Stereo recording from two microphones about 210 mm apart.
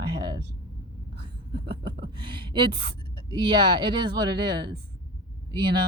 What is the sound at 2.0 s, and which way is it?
Speech, 20° right (ahead or behind).